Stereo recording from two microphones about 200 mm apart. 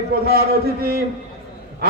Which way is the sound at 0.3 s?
50° right (ahead or behind).